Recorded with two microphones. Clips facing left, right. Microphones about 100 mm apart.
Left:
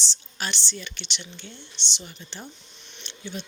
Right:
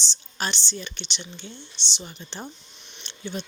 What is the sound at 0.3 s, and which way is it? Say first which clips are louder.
A woman's voice: right 3 dB; 30° right (ahead or behind).